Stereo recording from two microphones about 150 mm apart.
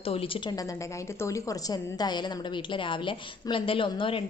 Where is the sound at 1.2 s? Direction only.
20° left (ahead or behind).